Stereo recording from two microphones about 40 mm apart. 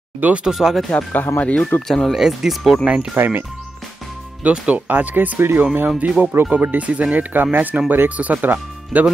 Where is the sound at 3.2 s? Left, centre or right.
Right.